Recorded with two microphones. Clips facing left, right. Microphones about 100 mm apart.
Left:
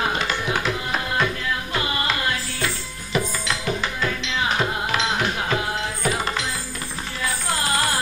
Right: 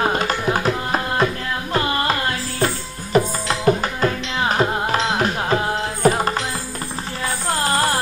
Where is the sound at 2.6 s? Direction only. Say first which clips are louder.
Right 6 dB; 40° right (ahead or behind).